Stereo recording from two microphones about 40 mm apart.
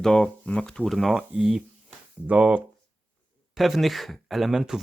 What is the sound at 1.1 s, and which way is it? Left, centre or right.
Speech, centre.